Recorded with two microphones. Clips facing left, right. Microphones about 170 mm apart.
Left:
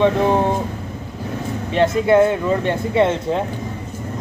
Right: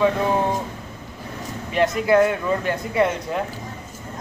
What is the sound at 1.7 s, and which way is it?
Speech, 25° left (ahead or behind).